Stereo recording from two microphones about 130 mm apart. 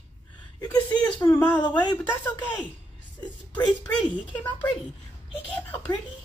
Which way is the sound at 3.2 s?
35° left (ahead or behind).